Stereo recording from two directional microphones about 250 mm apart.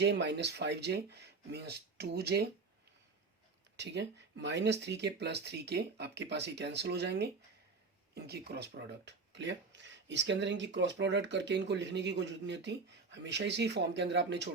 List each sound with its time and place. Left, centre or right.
0.0 s speech: right
3.8 s speech: right